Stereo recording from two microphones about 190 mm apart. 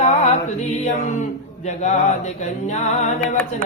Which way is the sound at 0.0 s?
35° left (ahead or behind).